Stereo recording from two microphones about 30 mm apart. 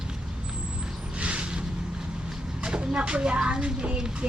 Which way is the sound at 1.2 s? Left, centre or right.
Right.